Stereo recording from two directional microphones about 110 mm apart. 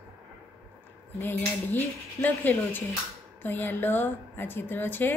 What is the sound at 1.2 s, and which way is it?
Cutlery, 15° left (ahead or behind).